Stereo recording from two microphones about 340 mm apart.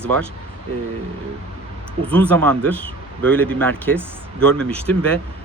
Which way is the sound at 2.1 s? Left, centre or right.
Centre.